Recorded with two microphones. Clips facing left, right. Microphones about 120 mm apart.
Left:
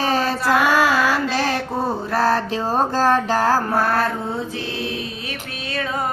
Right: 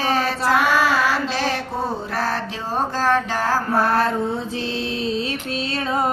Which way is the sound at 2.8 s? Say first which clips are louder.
Left 1 dB; 35° left (ahead or behind).